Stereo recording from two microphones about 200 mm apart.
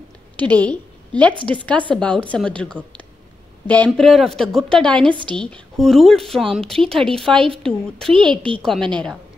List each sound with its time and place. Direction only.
0.4 s a woman's voice: 5° left (ahead or behind)
5.0 s a woman's voice: 25° right (ahead or behind)
5.4 s speech: centre (ahead or behind)